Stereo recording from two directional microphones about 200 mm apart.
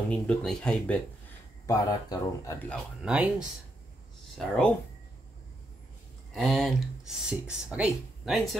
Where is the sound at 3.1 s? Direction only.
5° right (ahead or behind).